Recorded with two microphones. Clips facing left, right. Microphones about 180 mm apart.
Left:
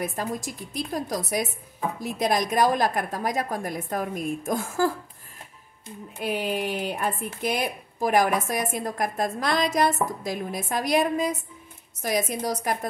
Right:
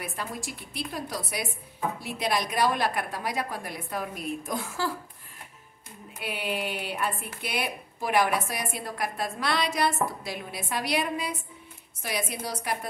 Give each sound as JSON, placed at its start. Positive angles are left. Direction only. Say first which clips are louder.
{"t": 0.0, "sound": "speech", "louder": "left 6 dB", "side_deg": 40}
{"t": 6.2, "sound": "speech", "louder": "left 5 dB", "side_deg": 45}